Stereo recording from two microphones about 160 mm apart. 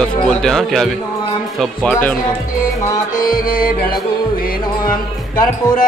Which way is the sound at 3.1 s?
60° left (ahead or behind).